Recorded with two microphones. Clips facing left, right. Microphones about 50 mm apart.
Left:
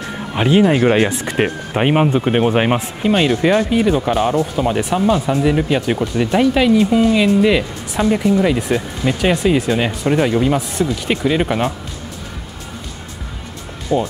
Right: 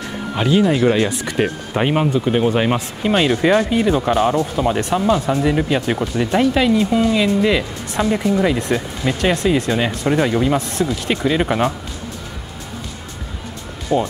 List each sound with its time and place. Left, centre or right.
0.4 s speech: left
3.0 s speech: centre
13.9 s speech: centre